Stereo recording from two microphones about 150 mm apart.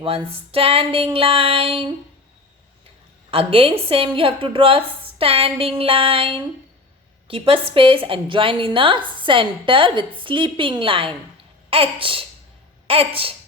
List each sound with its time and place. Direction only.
0.0 s a woman's voice: 40° right (ahead or behind)
3.3 s a woman's voice: 40° right (ahead or behind)